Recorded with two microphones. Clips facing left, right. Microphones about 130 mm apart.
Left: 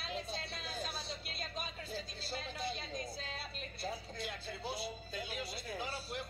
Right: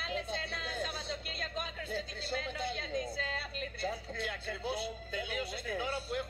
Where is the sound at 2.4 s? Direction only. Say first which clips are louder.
Right 3 dB; 60° right (ahead or behind).